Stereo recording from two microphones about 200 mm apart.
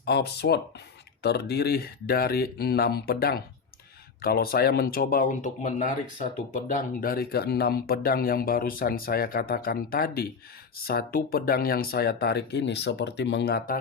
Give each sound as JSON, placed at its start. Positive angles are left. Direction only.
{"t": 0.0, "sound": "speech", "side_deg": 55}